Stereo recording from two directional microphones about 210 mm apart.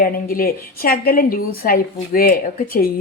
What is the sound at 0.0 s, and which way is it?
A woman's voice, 45° left (ahead or behind).